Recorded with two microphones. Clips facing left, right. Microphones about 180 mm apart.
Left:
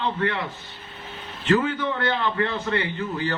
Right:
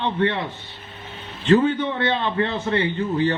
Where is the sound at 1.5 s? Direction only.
30° right (ahead or behind).